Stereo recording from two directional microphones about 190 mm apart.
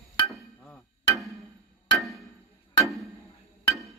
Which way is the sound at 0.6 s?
5° left (ahead or behind).